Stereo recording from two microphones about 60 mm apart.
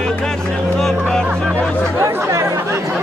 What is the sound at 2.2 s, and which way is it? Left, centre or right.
Chatter, right.